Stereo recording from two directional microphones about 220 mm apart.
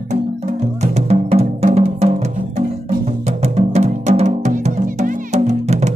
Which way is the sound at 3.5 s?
30° right (ahead or behind).